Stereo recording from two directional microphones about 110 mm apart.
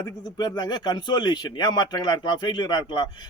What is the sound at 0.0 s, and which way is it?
Speech, 40° left (ahead or behind).